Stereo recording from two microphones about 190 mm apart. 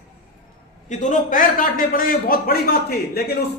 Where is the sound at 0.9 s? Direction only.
40° left (ahead or behind).